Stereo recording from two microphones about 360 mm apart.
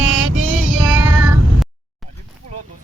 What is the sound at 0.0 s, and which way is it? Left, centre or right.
Music, right.